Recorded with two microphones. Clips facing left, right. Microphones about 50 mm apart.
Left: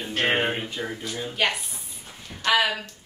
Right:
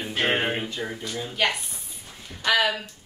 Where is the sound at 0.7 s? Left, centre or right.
Centre.